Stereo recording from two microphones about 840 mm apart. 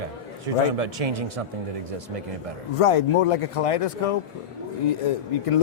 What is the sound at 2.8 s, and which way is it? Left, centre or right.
Speech, left.